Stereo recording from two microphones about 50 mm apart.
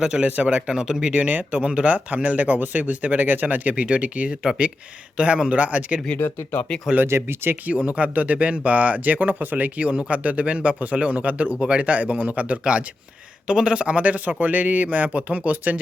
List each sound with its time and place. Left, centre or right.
0.0 s speech: centre
1.1 s speech: right
6.1 s speech: left
7.1 s speech: right
7.9 s speech: right